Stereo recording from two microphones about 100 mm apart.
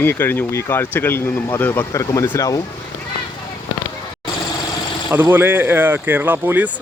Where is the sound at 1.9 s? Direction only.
30° left (ahead or behind).